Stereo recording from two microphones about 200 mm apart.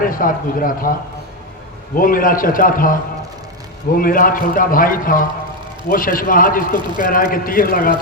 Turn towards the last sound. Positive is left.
turn(degrees=45)  # may be behind; listen again after turning